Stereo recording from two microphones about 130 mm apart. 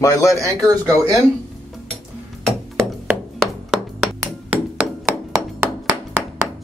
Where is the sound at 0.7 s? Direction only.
25° right (ahead or behind).